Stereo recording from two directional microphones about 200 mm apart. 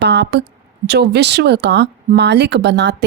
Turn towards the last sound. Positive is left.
turn(degrees=-60)  # may be behind; listen again after turning